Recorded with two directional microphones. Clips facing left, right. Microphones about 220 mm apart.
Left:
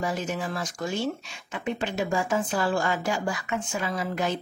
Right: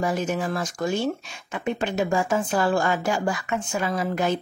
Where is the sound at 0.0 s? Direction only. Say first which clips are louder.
Right 4 dB; 50° right (ahead or behind).